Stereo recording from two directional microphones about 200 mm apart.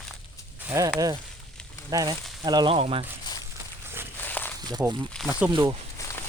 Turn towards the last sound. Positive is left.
turn(degrees=-25)  # may be behind; listen again after turning